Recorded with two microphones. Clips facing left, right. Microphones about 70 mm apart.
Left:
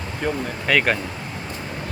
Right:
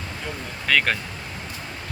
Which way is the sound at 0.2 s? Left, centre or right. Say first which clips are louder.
Left 11 dB; left.